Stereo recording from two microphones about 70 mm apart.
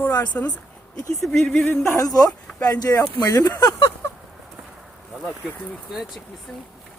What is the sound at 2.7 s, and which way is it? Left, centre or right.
Speech, left.